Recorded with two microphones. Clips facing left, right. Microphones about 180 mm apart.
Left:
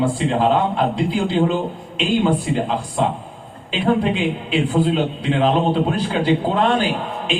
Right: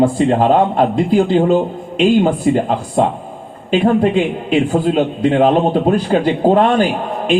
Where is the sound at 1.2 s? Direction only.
45° right (ahead or behind).